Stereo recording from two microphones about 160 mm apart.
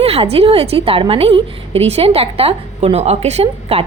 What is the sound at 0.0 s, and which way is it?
A woman's voice, 40° right (ahead or behind).